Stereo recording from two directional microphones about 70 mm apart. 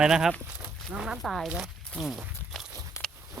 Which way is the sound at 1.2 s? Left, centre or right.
Centre.